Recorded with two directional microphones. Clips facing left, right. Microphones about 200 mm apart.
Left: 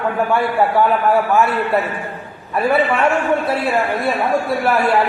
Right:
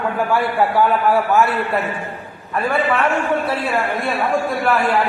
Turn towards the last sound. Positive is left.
turn(degrees=10)  # may be behind; listen again after turning